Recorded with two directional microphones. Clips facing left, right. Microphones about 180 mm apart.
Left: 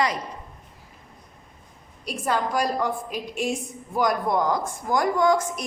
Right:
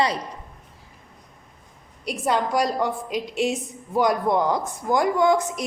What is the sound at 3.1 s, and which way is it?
Speech, 90° right.